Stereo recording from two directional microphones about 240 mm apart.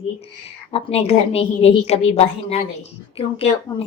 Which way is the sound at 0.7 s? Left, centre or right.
Left.